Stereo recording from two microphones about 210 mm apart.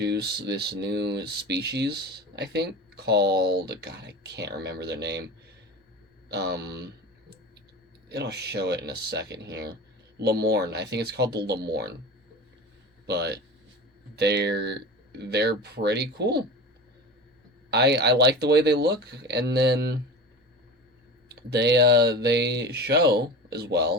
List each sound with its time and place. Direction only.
0.0 s speech: 50° right (ahead or behind)
6.2 s speech: 55° right (ahead or behind)
8.1 s speech: 50° right (ahead or behind)
13.1 s speech: 50° right (ahead or behind)
17.7 s speech: 50° right (ahead or behind)
21.5 s speech: 55° right (ahead or behind)